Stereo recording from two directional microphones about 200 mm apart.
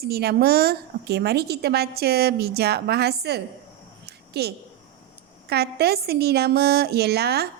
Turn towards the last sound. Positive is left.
turn(degrees=-55)  # may be behind; listen again after turning